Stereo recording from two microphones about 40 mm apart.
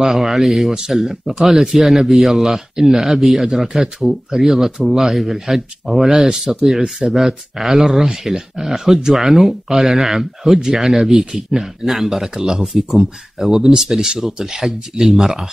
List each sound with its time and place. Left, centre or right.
0.0 s speech: centre
1.8 s speech: centre